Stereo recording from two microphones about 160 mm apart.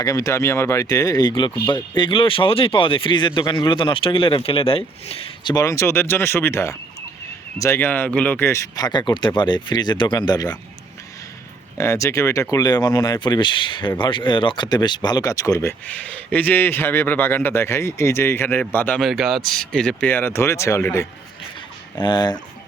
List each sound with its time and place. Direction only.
0.0 s speech: 20° left (ahead or behind)
11.8 s speech: 20° left (ahead or behind)
15.9 s speech: 10° left (ahead or behind)
18.9 s speech: centre (ahead or behind); by 21.1 s 15° left (ahead or behind)
22.0 s speech: 25° left (ahead or behind)